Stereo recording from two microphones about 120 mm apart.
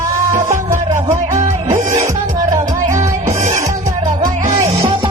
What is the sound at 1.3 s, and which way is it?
Music, 90° right.